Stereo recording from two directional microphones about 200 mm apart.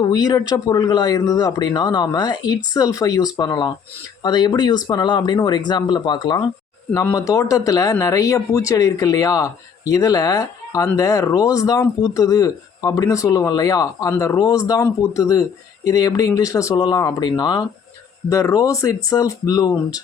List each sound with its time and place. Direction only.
0.0 s speech: 20° left (ahead or behind)